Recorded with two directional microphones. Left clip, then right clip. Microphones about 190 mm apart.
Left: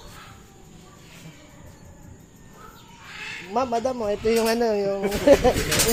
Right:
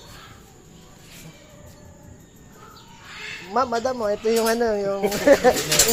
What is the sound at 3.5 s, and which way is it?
Speech, 10° left (ahead or behind).